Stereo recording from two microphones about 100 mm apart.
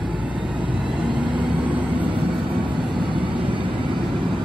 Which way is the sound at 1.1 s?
55° right (ahead or behind).